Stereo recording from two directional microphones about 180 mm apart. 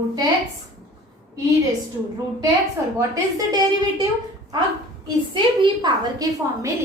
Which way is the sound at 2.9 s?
20° right (ahead or behind).